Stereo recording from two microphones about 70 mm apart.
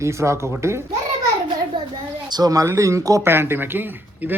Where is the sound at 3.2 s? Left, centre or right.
Right.